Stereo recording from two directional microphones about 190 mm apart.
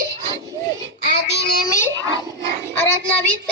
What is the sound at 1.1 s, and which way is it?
Child singing, 60° left (ahead or behind).